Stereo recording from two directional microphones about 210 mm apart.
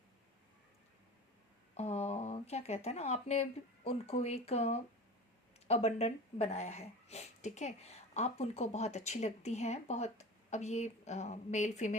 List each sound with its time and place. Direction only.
1.7 s speech: 30° left (ahead or behind)